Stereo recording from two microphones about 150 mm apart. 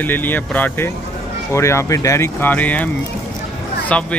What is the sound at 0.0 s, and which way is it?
Speech, 10° left (ahead or behind).